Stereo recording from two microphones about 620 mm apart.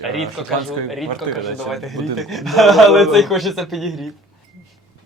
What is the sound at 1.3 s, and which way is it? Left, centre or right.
Speech, right.